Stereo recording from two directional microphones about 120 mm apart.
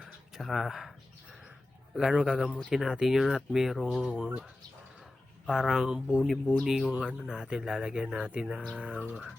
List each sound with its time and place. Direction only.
0.3 s speech: centre (ahead or behind)
2.0 s speech: 5° right (ahead or behind)
5.5 s speech: 5° right (ahead or behind)